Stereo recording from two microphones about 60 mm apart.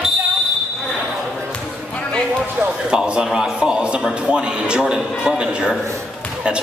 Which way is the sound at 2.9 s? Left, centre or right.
Centre.